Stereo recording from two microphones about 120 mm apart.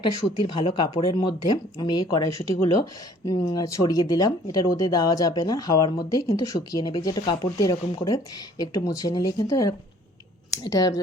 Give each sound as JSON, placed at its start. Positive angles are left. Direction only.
{"t": 0.0, "sound": "speech", "side_deg": 45}